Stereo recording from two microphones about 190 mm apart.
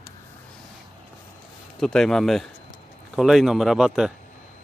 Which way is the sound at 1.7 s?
5° left (ahead or behind).